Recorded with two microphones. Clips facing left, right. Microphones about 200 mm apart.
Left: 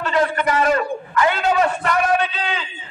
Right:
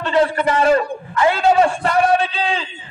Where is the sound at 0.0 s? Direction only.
30° right (ahead or behind).